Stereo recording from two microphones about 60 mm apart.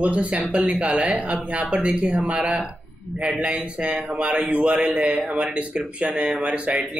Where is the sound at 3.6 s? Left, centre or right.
Right.